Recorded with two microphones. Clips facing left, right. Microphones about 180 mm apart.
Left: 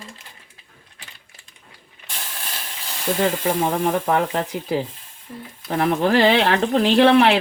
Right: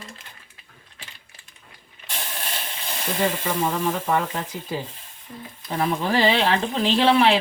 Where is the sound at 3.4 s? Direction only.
55° left (ahead or behind).